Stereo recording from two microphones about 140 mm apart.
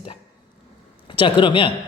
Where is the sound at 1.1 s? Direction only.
35° left (ahead or behind).